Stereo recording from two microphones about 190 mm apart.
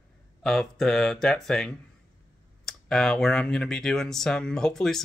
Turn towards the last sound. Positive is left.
turn(degrees=0)  # may be behind; listen again after turning